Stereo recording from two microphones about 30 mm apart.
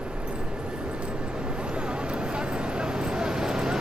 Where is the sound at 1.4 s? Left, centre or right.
Right.